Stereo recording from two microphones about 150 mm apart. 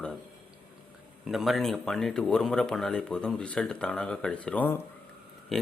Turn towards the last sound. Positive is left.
turn(degrees=0)  # may be behind; listen again after turning